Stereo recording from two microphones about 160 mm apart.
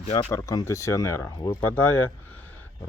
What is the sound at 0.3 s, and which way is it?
Speech, 20° left (ahead or behind).